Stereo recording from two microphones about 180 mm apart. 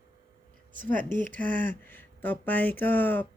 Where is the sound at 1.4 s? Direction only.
10° left (ahead or behind).